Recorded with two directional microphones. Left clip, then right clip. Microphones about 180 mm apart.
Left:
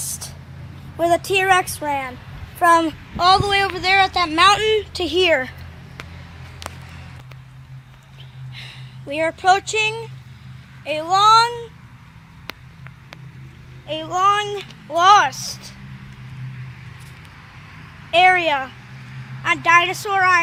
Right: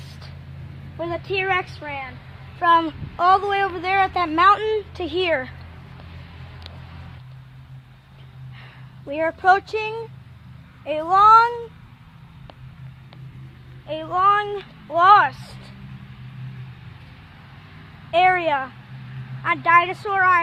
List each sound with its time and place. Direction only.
0.9 s a woman's voice: 55° left (ahead or behind)
3.2 s speech: centre (ahead or behind)
4.9 s speech: 30° left (ahead or behind)
8.5 s speech: 5° left (ahead or behind)
13.8 s speech: 15° left (ahead or behind)
18.1 s speech: 15° left (ahead or behind)